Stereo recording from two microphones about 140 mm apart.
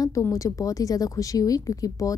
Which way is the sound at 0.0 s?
20° left (ahead or behind).